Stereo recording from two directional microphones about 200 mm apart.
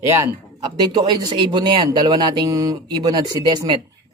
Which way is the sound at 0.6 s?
20° right (ahead or behind).